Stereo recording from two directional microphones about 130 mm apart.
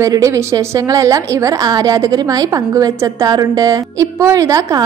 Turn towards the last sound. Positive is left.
turn(degrees=-25)  # may be behind; listen again after turning